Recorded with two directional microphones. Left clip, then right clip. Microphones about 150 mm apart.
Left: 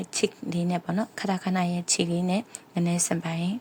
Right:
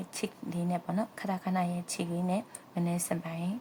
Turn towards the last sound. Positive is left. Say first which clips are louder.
# left 6 dB
turn(degrees=30)  # may be behind; listen again after turning